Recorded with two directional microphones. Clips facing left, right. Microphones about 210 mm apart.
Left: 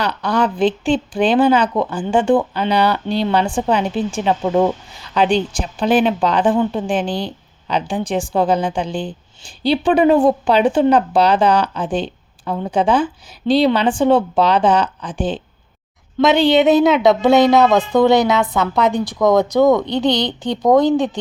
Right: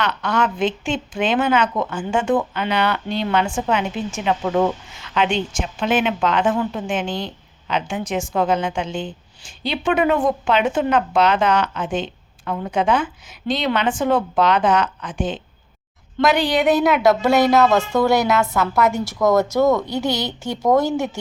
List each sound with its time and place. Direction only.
0.0 s a woman's voice: 35° left (ahead or behind)
16.9 s a woman's voice: centre (ahead or behind)
17.7 s a woman's voice: 20° left (ahead or behind)
19.2 s a woman's voice: 5° right (ahead or behind)
19.5 s speech: 15° left (ahead or behind)